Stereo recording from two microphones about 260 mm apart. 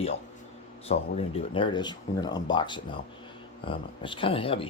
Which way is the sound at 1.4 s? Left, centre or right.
Centre.